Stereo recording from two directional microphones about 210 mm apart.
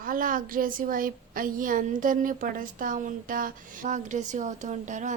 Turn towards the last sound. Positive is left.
turn(degrees=-35)  # may be behind; listen again after turning